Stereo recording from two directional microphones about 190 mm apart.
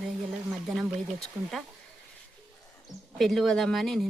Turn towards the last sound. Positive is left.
turn(degrees=0)  # may be behind; listen again after turning